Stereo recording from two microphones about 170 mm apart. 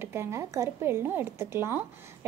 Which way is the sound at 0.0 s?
15° right (ahead or behind).